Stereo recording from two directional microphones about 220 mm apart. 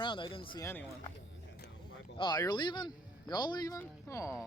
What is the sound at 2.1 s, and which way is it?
Speech, 20° left (ahead or behind).